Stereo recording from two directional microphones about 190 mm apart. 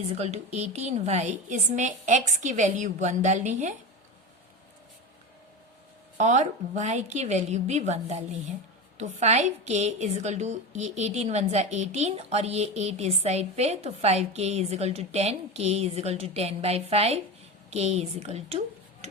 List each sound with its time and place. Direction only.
0.2 s a woman's voice: 35° right (ahead or behind)
6.1 s a woman's voice: 40° right (ahead or behind)